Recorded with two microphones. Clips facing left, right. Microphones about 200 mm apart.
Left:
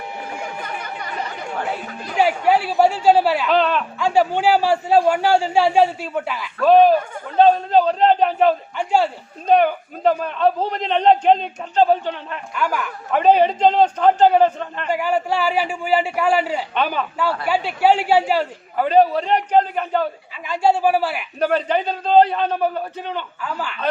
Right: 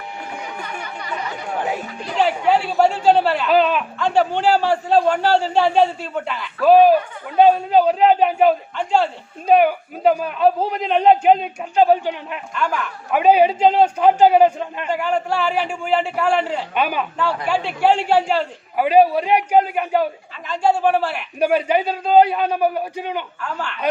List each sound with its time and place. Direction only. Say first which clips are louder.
0.9 s chatter: left 1 dB; 50° left (ahead or behind)
2.1 s a man's voice: left 1 dB; 10° left (ahead or behind)
3.5 s a man's voice: right 4 dB; 5° right (ahead or behind)
3.9 s a man's voice: left 2 dB; 10° left (ahead or behind)
6.6 s a man's voice: right 1 dB; 5° right (ahead or behind)
12.5 s speech: even; 5° left (ahead or behind)
13.1 s a man's voice: right 1 dB; 10° right (ahead or behind)
14.8 s a man's voice: left 1 dB; 5° left (ahead or behind)
16.7 s a man's voice: right 2 dB; 10° right (ahead or behind)
17.5 s a man's voice: left 1 dB; 5° left (ahead or behind)
18.8 s a man's voice: right 1 dB; 10° right (ahead or behind)
20.5 s a man's voice: even; 5° left (ahead or behind)
21.3 s a man's voice: right 2 dB; 10° right (ahead or behind)
23.4 s speech: even; 5° left (ahead or behind)